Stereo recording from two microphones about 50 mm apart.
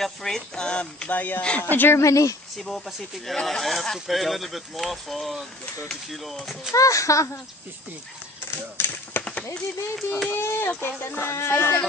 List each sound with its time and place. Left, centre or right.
0.0 s music: centre
1.0 s speech: left
2.0 s speech: left
3.4 s speech: centre
6.7 s speech: left
8.5 s speech: left
9.9 s speech: centre
10.3 s a sound: left
10.8 s speech: left
11.3 s a sound: left